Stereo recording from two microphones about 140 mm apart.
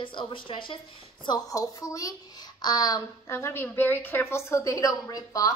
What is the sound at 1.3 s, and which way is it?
A child's voice, 25° left (ahead or behind).